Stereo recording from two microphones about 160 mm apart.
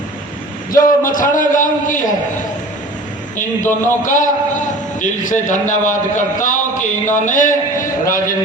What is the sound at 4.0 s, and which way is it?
A man's voice, 55° left (ahead or behind).